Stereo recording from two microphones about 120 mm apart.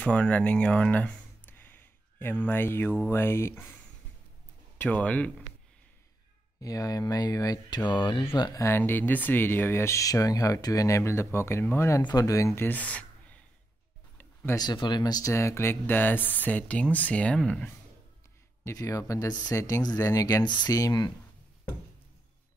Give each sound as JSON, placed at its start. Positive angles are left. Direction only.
{"t": 0.0, "sound": "speech", "side_deg": 10}
{"t": 4.7, "sound": "speech", "side_deg": 10}
{"t": 6.6, "sound": "speech", "side_deg": 30}
{"t": 8.6, "sound": "speech", "side_deg": 20}
{"t": 14.5, "sound": "speech", "side_deg": 35}
{"t": 18.6, "sound": "speech", "side_deg": 25}